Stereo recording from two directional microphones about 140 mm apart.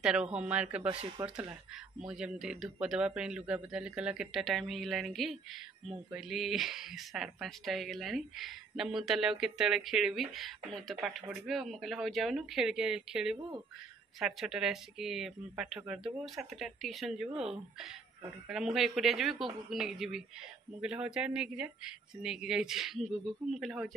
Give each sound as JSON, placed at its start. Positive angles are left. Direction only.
{"t": 0.0, "sound": "speech", "side_deg": -5}
{"t": 2.0, "sound": "speech", "side_deg": -5}